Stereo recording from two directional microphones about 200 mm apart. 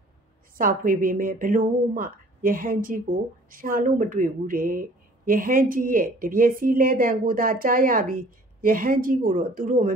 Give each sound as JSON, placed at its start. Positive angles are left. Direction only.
{"t": 0.6, "sound": "speech", "side_deg": -45}